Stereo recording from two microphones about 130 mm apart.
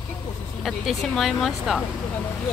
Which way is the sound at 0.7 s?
Centre (ahead or behind).